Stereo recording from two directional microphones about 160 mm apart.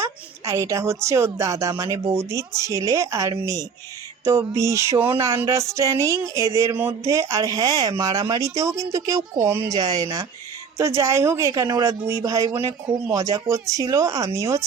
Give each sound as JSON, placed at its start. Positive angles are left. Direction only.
{"t": 0.0, "sound": "speech", "side_deg": -15}
{"t": 4.2, "sound": "a sound", "side_deg": -15}
{"t": 7.1, "sound": "speech", "side_deg": -20}